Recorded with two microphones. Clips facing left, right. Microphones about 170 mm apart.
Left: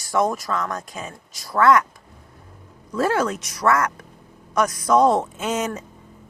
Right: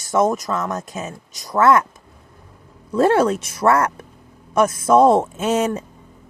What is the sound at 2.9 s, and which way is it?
Speech, 30° right (ahead or behind).